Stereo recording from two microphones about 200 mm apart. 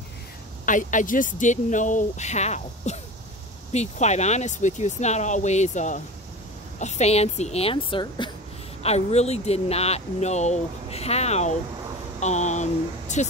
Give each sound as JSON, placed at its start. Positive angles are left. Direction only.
{"t": 0.7, "sound": "speech", "side_deg": 40}